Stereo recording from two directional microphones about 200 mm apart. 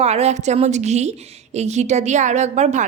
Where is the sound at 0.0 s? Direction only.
30° right (ahead or behind).